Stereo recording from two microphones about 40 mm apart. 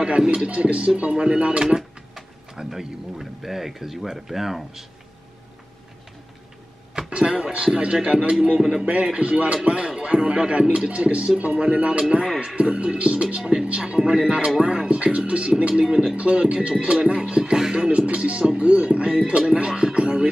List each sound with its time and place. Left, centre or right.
0.0 s music: right
0.5 s speech: right; by 4.8 s centre
7.0 s a sound: right
7.6 s music: centre
15.8 s speech: centre
16.2 s music: right
17.9 s music: right
18.4 s music: centre
18.7 s music: right